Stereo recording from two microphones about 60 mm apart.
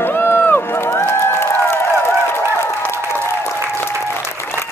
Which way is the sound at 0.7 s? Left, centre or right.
Left.